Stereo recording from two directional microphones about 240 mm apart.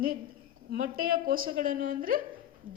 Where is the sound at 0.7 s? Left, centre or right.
Right.